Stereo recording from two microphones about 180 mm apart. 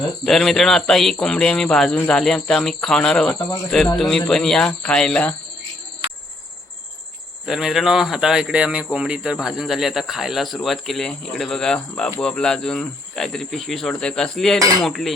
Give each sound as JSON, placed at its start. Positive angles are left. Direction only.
{"t": 0.3, "sound": "speech", "side_deg": 0}
{"t": 3.3, "sound": "speech", "side_deg": 20}
{"t": 3.9, "sound": "speech", "side_deg": 0}
{"t": 7.4, "sound": "speech", "side_deg": 0}